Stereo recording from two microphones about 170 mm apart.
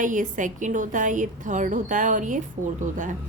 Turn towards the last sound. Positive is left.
turn(degrees=-50)  # may be behind; listen again after turning